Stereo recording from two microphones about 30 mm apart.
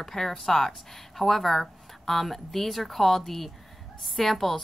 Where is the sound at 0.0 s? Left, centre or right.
Centre.